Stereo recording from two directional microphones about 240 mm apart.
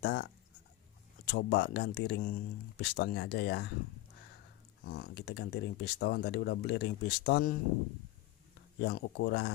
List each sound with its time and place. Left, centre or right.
0.0 s speech: left
4.8 s speech: left
8.7 s speech: left